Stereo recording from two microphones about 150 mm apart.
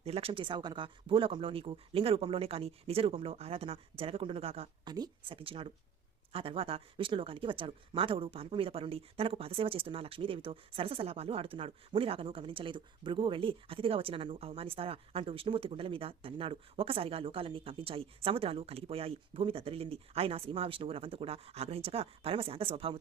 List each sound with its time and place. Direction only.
0.0 s speech: 40° right (ahead or behind)
4.9 s speech: 30° right (ahead or behind)